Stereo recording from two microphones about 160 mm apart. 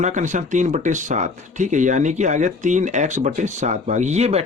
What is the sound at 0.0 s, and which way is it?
Speech, 50° right (ahead or behind).